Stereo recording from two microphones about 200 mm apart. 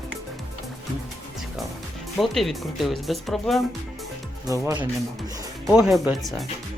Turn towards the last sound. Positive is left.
turn(degrees=0)  # may be behind; listen again after turning